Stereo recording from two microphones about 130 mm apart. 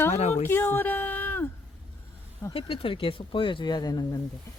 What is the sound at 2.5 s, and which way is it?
Speech, 45° left (ahead or behind).